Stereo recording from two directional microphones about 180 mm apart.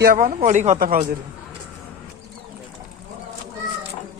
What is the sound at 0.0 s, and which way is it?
Speech, 50° right (ahead or behind).